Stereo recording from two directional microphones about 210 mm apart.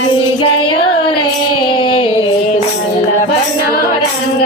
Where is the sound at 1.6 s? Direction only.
25° left (ahead or behind).